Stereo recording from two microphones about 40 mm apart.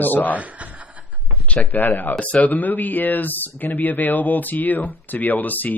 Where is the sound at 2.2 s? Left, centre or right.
Left.